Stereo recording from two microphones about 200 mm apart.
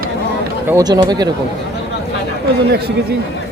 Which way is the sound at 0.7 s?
20° right (ahead or behind).